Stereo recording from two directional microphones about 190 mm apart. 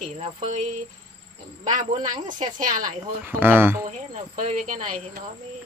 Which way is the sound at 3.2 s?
10° right (ahead or behind).